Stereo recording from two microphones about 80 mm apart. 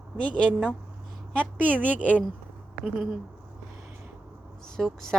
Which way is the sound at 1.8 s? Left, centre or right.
Centre.